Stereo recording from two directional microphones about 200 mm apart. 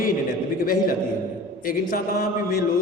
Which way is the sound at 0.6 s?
45° left (ahead or behind).